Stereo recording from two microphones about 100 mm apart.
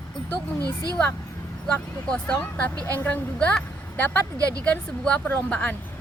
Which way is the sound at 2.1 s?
10° left (ahead or behind).